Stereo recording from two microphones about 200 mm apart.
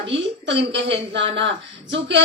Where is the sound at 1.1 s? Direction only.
65° right (ahead or behind).